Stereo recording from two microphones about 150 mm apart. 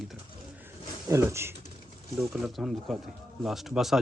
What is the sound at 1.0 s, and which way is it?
Speech, 20° right (ahead or behind).